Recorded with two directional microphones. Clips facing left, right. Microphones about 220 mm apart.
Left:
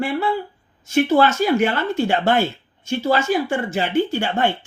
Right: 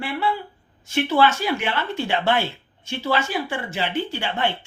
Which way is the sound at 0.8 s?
45° left (ahead or behind).